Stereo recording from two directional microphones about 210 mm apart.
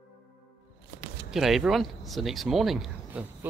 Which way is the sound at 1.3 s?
Centre (ahead or behind).